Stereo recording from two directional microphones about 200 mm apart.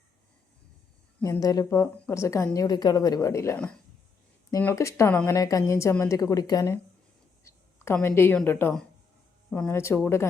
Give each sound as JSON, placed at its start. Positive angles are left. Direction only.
{"t": 1.2, "sound": "a woman's voice", "side_deg": 15}
{"t": 7.5, "sound": "a sound", "side_deg": 15}
{"t": 7.9, "sound": "a woman's voice", "side_deg": 10}